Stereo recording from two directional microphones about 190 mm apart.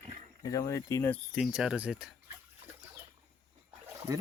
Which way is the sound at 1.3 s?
Centre (ahead or behind).